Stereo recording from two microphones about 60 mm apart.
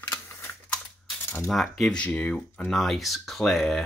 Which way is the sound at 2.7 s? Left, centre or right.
Centre.